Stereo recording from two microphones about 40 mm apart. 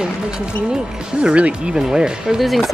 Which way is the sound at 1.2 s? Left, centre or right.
Right.